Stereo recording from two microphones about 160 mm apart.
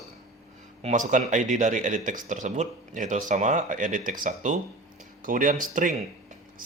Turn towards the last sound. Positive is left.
turn(degrees=-55)  # may be behind; listen again after turning